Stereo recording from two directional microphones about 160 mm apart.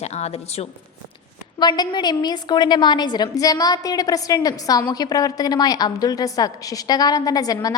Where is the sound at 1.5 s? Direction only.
25° left (ahead or behind).